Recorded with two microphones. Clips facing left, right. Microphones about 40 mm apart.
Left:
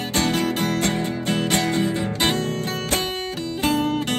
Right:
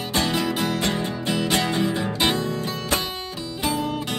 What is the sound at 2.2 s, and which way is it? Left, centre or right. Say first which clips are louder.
Music: even; left.